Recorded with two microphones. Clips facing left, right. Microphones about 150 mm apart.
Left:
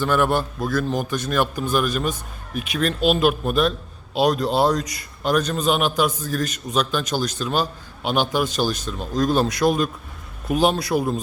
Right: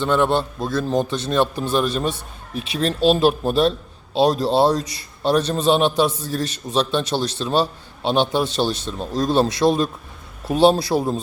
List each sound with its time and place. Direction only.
0.0 s a man's voice: 25° right (ahead or behind)